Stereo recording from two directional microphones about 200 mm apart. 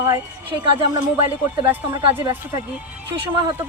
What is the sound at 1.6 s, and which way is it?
Speech, 10° right (ahead or behind).